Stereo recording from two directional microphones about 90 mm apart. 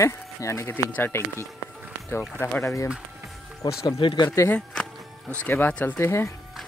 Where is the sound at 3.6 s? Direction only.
50° left (ahead or behind).